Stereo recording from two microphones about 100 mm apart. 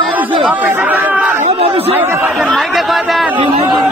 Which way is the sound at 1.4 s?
80° right.